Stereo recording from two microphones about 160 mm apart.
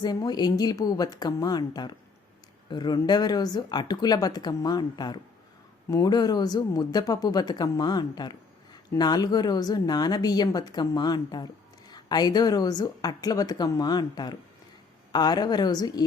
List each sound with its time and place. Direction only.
0.0 s speech: 25° left (ahead or behind)